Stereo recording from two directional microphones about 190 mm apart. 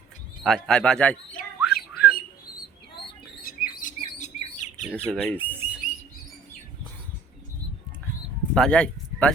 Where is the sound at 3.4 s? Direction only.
50° left (ahead or behind).